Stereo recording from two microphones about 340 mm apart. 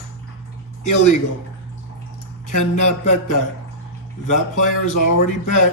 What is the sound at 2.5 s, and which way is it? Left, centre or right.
Speech, left.